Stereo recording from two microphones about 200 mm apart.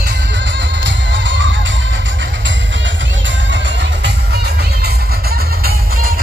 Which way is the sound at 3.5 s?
60° right (ahead or behind).